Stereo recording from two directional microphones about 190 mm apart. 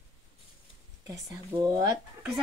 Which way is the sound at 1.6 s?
20° right (ahead or behind).